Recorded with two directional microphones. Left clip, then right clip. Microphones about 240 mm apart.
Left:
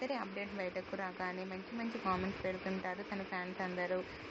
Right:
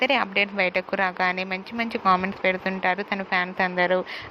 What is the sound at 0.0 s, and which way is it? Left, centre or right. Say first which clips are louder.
Speech: right 19 dB; right.